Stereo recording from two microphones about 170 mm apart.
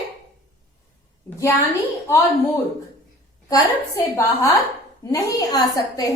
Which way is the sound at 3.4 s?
20° left (ahead or behind).